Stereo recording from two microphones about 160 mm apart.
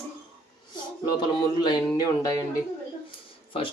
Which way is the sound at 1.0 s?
30° left (ahead or behind).